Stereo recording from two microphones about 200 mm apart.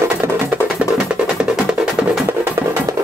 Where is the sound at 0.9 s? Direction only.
5° right (ahead or behind).